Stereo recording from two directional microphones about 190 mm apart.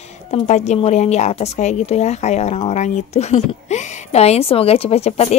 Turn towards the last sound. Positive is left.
turn(degrees=35)  # may be behind; listen again after turning